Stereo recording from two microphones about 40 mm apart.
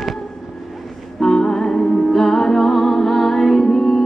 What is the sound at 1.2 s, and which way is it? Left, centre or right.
Music, centre.